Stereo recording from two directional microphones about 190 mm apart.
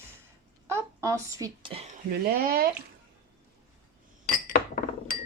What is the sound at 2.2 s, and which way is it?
Speech, 50° right (ahead or behind).